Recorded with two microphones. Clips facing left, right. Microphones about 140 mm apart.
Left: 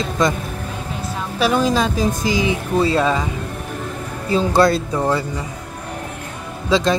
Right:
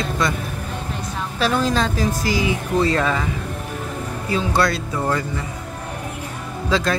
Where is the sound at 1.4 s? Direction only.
15° left (ahead or behind).